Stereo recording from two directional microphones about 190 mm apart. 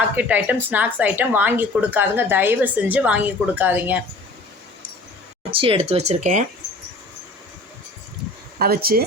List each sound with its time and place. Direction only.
0.2 s speech: 10° right (ahead or behind)
5.5 s speech: 30° right (ahead or behind)
8.5 s speech: 50° right (ahead or behind)